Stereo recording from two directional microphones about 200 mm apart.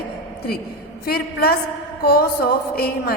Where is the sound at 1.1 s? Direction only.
50° left (ahead or behind).